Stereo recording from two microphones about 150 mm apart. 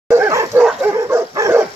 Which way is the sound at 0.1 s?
15° right (ahead or behind).